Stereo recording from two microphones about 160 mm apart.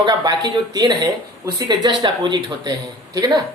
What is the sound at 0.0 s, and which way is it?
Speech, 30° right (ahead or behind).